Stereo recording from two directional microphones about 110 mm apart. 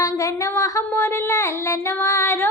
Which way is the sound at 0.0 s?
30° left (ahead or behind).